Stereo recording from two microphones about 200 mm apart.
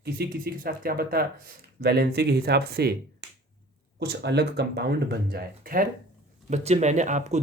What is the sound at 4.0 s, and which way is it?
Speech, 55° right (ahead or behind).